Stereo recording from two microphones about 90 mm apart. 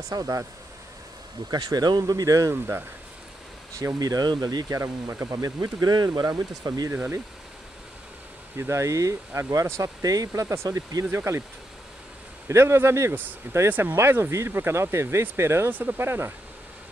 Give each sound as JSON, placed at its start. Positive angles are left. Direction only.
{"t": 0.1, "sound": "speech", "side_deg": -45}
{"t": 1.5, "sound": "speech", "side_deg": -50}
{"t": 2.5, "sound": "speech", "side_deg": -25}
{"t": 3.7, "sound": "speech", "side_deg": -40}
{"t": 4.7, "sound": "speech", "side_deg": -35}
{"t": 6.9, "sound": "speech", "side_deg": -25}
{"t": 8.5, "sound": "speech", "side_deg": -30}
{"t": 12.4, "sound": "speech", "side_deg": -30}
{"t": 13.1, "sound": "speech", "side_deg": -20}